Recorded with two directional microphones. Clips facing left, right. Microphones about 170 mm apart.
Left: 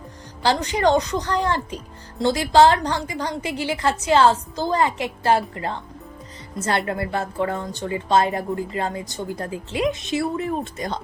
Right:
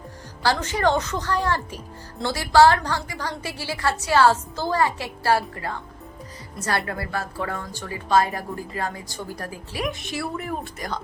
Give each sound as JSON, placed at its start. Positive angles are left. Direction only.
{"t": 0.4, "sound": "a woman's voice", "side_deg": 15}